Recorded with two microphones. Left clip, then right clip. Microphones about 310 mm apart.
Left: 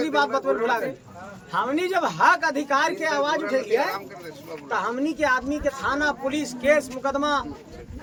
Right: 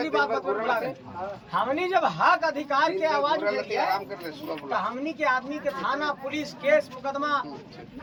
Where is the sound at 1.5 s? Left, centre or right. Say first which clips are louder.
Left 1 dB; centre.